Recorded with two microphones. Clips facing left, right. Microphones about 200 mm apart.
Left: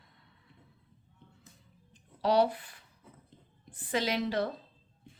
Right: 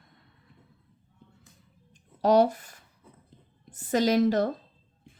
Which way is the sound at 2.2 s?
45° right (ahead or behind).